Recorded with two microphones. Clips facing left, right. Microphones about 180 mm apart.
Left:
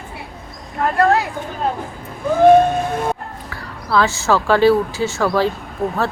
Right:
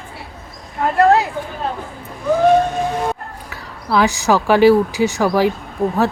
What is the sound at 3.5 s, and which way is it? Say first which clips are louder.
Speech: even; 20° right (ahead or behind).